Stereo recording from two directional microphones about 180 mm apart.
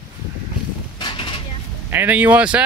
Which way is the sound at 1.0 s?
25° left (ahead or behind).